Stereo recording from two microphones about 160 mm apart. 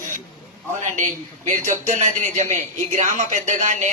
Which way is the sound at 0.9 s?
55° right (ahead or behind).